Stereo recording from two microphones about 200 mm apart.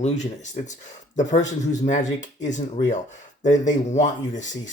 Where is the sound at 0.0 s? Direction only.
35° left (ahead or behind).